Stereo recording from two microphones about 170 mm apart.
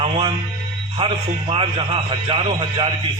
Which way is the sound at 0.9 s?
30° right (ahead or behind).